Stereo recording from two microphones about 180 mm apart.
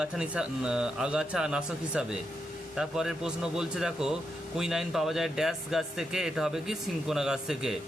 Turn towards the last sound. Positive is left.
turn(degrees=-5)  # may be behind; listen again after turning